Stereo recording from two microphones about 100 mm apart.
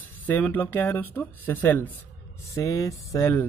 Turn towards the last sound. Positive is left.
turn(degrees=30)  # may be behind; listen again after turning